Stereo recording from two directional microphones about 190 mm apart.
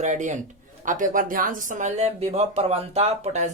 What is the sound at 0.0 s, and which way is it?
Speech, 40° right (ahead or behind).